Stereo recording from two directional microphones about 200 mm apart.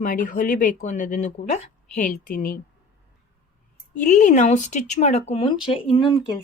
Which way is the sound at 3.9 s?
40° left (ahead or behind).